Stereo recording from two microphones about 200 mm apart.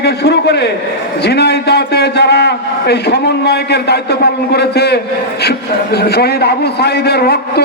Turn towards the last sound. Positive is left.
turn(degrees=55)  # may be behind; listen again after turning